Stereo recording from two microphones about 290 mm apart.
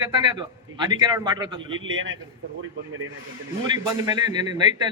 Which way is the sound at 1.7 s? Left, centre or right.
Right.